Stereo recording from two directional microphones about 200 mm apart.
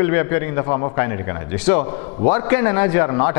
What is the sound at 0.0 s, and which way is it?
A man's voice, 15° left (ahead or behind).